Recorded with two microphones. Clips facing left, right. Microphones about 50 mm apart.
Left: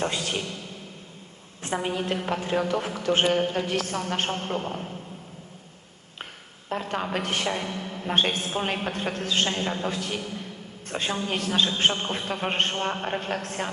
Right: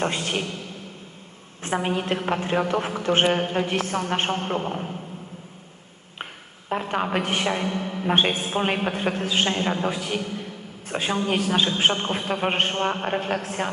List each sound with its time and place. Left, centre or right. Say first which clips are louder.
0.0 s a woman's voice: right 3 dB; right
1.6 s a woman's voice: right 3 dB; right
6.7 s a man's voice: right 4 dB; right